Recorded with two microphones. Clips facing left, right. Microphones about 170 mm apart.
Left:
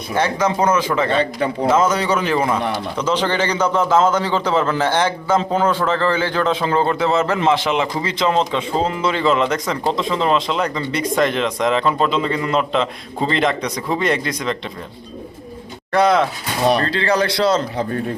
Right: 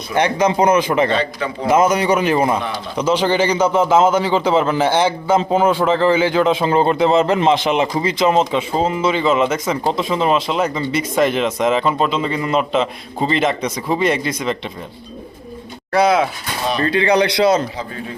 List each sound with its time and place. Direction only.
0.2 s a man's voice: 15° right (ahead or behind); by 14.5 s centre (ahead or behind)
15.9 s a man's voice: 5° right (ahead or behind)
16.8 s a man's voice: 20° right (ahead or behind)